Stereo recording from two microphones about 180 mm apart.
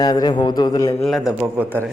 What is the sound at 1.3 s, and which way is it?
Speech, 10° right (ahead or behind).